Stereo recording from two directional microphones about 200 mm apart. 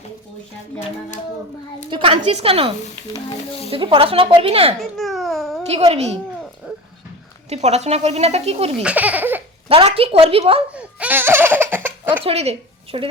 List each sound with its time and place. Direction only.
1.9 s a woman's voice: 25° right (ahead or behind)
4.8 s babbling: centre (ahead or behind)
5.6 s speech: 30° right (ahead or behind)
6.7 s dog: 5° right (ahead or behind)
7.5 s speech: 35° right (ahead or behind)
8.8 s speech: 5° right (ahead or behind)
9.6 s a woman's voice: 30° right (ahead or behind)
10.7 s speech: 5° right (ahead or behind)
12.2 s a woman's voice: 30° right (ahead or behind)